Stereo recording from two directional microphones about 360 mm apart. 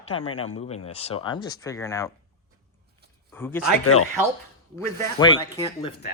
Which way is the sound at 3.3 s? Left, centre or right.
Centre.